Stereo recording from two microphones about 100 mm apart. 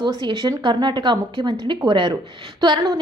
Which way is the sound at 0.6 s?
50° right (ahead or behind).